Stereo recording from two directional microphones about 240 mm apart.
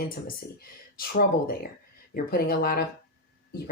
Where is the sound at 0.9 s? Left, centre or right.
Left.